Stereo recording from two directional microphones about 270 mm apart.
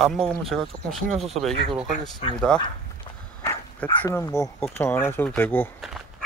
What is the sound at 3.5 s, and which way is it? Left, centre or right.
Speech, centre.